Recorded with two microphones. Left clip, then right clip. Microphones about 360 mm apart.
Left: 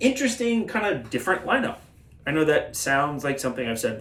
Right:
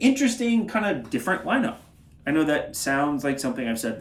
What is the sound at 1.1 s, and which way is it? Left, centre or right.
Speech, centre.